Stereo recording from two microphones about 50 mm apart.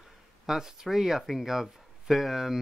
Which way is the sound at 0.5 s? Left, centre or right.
Centre.